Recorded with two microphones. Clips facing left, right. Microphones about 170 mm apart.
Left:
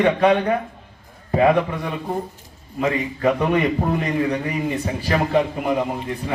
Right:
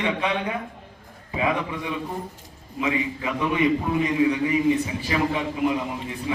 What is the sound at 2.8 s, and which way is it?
A man's voice, 55° left (ahead or behind).